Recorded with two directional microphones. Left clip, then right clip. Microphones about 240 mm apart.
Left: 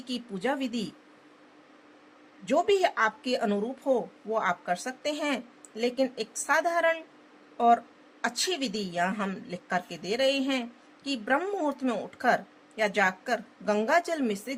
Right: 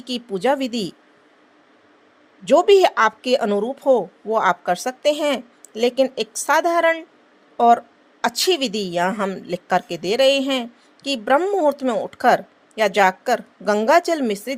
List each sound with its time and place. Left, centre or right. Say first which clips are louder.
0.0 s a woman's voice: right 11 dB; right
2.4 s a woman's voice: right 11 dB; right